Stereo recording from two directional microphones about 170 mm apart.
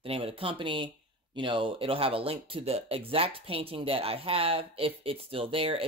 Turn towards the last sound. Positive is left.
turn(degrees=-35)  # may be behind; listen again after turning